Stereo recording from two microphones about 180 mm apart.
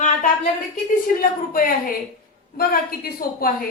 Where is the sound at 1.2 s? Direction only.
55° left (ahead or behind).